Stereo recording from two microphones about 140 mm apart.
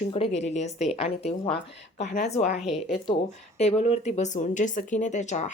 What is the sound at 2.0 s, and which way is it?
Speech, 80° left.